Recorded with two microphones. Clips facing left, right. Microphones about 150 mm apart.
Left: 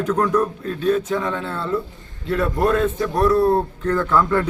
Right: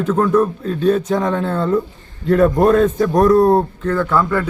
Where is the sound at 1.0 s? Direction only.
40° right (ahead or behind).